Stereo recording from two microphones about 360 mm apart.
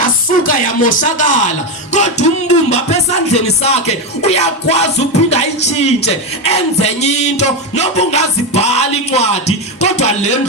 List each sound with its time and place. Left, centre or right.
0.0 s speech: left
1.9 s music: centre